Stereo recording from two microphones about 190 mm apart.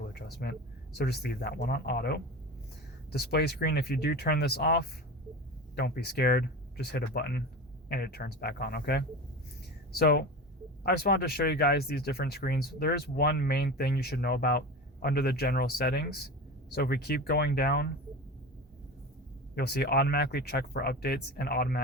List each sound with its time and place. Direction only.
0.1 s speech: 55° left (ahead or behind)
19.5 s speech: 60° left (ahead or behind)